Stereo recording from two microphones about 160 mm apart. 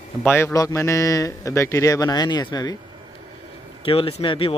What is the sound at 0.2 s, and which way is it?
Speech, 15° left (ahead or behind).